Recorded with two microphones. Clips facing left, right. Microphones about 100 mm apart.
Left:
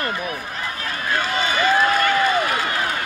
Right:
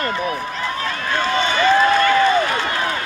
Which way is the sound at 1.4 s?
25° right (ahead or behind).